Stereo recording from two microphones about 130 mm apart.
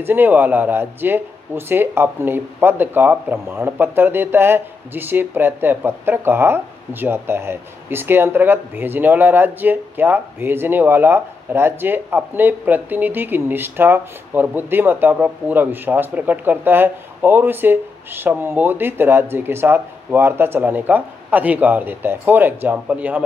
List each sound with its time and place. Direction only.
0.0 s speech: 15° right (ahead or behind)